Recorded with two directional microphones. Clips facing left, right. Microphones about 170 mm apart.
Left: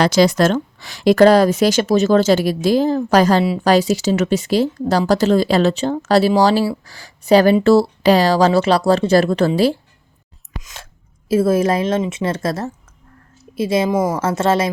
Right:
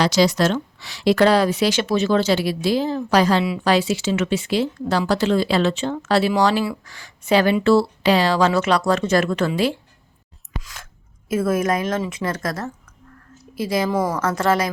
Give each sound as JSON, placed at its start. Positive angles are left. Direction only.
{"t": 0.0, "sound": "a woman's voice", "side_deg": 50}
{"t": 10.6, "sound": "a sound", "side_deg": 20}
{"t": 11.3, "sound": "a woman's voice", "side_deg": 30}